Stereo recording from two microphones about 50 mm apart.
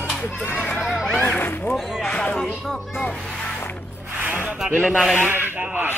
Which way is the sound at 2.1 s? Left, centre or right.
Left.